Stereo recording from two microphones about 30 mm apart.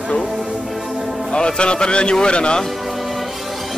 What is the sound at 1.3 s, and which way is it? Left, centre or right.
A man's voice, left.